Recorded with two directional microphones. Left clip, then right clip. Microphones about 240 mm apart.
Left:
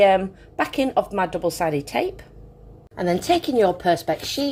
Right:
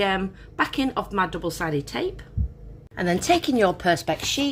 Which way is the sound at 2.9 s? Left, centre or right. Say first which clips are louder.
Left 1 dB; right.